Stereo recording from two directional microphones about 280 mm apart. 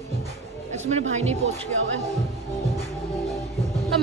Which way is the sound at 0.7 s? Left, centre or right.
Right.